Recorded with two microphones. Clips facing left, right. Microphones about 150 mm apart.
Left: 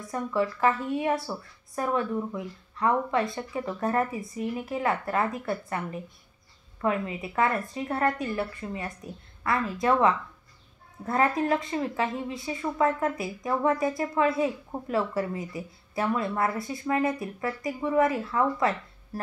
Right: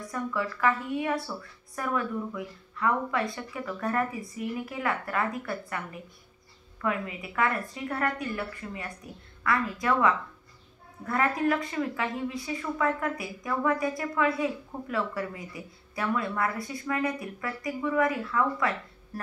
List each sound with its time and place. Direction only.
0.1 s a woman's voice: 30° left (ahead or behind)